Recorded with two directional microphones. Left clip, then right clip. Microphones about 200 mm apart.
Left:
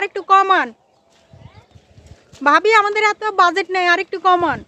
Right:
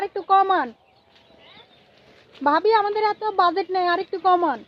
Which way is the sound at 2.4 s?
30° left (ahead or behind).